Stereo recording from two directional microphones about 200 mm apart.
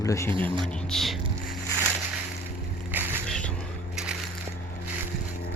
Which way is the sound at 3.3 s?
5° left (ahead or behind).